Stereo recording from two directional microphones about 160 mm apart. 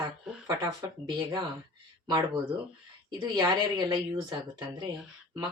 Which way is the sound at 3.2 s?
25° right (ahead or behind).